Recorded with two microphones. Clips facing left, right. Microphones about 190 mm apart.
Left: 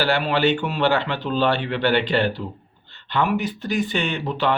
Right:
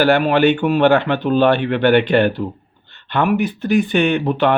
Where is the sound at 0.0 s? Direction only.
55° right (ahead or behind).